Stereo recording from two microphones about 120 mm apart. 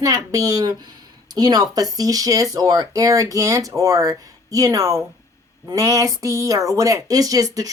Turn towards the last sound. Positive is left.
turn(degrees=-30)  # may be behind; listen again after turning